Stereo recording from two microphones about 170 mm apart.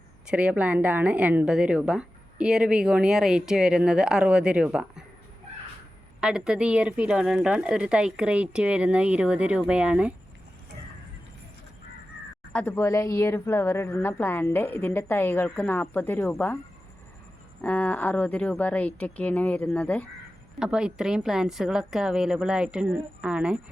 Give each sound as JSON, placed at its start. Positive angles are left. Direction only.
{"t": 0.3, "sound": "a woman's voice", "side_deg": -5}
{"t": 6.1, "sound": "a woman's voice", "side_deg": -5}
{"t": 12.5, "sound": "a woman's voice", "side_deg": 15}
{"t": 17.6, "sound": "a woman's voice", "side_deg": 10}
{"t": 20.6, "sound": "a woman's voice", "side_deg": -5}